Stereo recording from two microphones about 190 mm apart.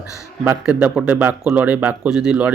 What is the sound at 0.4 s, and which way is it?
Speech, 10° right (ahead or behind).